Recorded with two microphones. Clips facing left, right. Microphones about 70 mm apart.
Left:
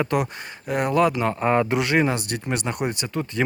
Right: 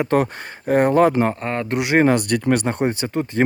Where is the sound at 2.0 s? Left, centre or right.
Right.